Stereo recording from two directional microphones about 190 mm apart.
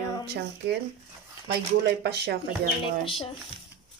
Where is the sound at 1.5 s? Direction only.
60° right (ahead or behind).